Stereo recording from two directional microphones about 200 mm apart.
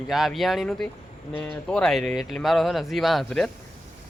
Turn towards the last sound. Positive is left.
turn(degrees=0)  # may be behind; listen again after turning